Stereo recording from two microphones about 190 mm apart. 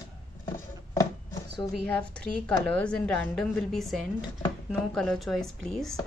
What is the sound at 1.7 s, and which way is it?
Speech, 5° left (ahead or behind).